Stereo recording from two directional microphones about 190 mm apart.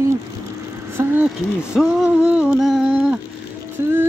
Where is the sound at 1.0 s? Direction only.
10° right (ahead or behind).